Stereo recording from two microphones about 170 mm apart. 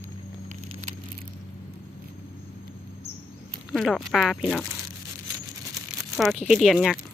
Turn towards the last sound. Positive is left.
turn(degrees=0)  # may be behind; listen again after turning